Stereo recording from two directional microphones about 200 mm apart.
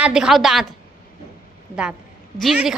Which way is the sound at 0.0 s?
5° right (ahead or behind).